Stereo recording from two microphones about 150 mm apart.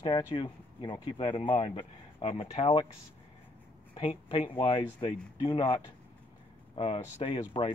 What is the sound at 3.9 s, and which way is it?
Speech, 40° left (ahead or behind).